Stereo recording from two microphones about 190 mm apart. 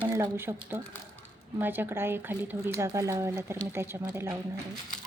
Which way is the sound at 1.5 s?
10° right (ahead or behind).